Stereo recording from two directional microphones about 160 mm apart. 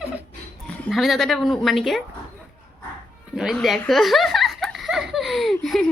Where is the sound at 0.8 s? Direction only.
Centre (ahead or behind).